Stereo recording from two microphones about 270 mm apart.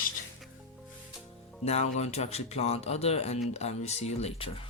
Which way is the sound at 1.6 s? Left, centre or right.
Left.